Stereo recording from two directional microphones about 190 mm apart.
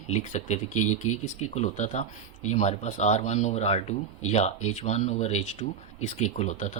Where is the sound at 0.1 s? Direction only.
35° left (ahead or behind).